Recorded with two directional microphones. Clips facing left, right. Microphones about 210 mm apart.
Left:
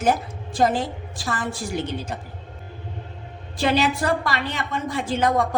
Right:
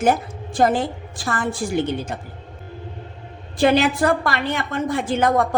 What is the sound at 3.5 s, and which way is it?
A woman's voice, 55° right (ahead or behind).